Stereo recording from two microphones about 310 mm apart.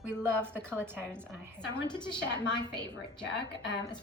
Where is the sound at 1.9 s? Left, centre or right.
Centre.